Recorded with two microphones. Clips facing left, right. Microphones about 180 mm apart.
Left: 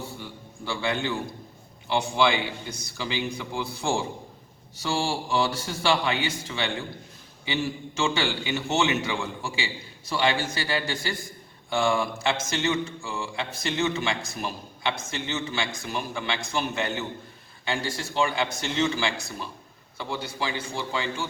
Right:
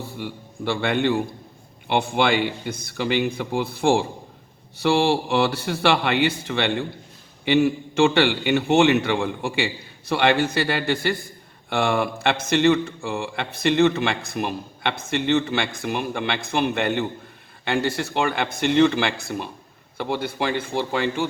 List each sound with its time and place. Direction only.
0.2 s a man's voice: 65° right (ahead or behind)